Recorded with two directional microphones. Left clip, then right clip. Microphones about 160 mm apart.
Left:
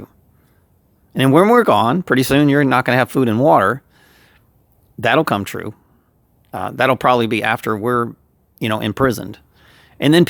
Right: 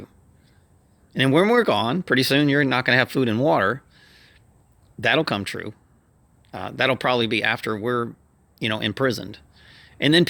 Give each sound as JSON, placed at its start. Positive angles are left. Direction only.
{"t": 1.1, "sound": "speech", "side_deg": 45}